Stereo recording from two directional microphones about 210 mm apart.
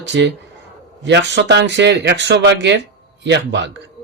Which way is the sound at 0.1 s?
55° right (ahead or behind).